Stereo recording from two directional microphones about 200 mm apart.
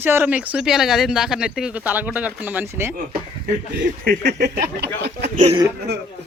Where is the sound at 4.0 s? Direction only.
50° right (ahead or behind).